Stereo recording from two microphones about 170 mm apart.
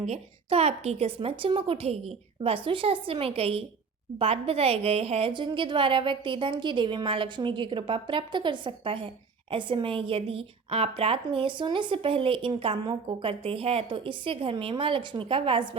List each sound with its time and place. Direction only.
0.0 s a woman's voice: 40° right (ahead or behind)